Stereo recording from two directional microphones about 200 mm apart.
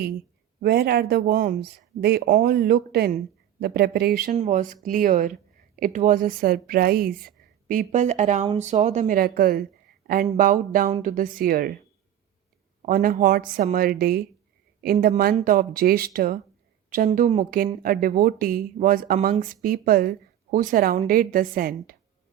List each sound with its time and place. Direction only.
0.6 s speech: 55° right (ahead or behind)
12.8 s speech: 45° right (ahead or behind)